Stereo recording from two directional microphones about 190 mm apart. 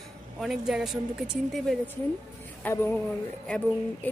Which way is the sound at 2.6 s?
10° left (ahead or behind).